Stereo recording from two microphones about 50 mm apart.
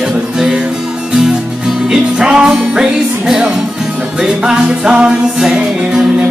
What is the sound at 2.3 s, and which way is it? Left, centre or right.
Music, centre.